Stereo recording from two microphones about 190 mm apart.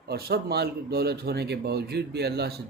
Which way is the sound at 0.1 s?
55° right (ahead or behind).